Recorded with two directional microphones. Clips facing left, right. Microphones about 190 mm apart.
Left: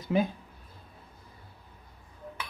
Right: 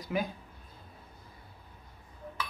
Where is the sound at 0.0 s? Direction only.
25° left (ahead or behind).